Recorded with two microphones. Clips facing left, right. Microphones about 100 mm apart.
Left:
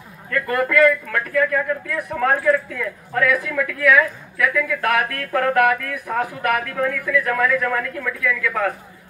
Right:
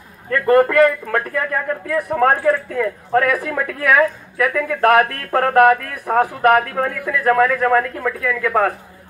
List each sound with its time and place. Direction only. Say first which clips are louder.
0.3 s a man's voice: right 7 dB; 40° right (ahead or behind)